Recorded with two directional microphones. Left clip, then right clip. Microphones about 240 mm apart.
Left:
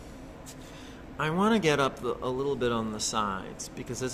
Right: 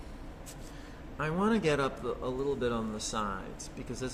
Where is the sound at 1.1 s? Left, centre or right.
Left.